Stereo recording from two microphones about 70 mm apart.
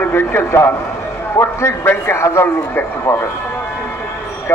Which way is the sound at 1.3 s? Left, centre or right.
Left.